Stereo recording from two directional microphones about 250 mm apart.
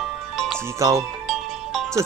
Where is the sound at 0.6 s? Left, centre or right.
Centre.